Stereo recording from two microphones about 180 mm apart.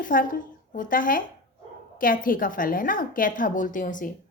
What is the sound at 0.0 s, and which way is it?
A woman's voice, 50° left (ahead or behind).